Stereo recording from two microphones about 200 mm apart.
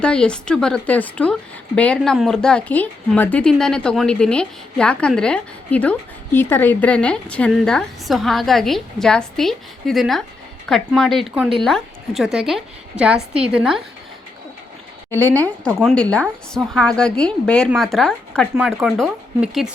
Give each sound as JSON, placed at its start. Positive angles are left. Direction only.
{"t": 0.0, "sound": "speech", "side_deg": 5}
{"t": 15.4, "sound": "speech", "side_deg": 5}